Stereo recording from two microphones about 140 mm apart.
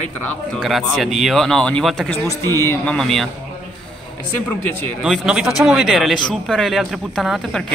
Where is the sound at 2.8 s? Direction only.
5° left (ahead or behind).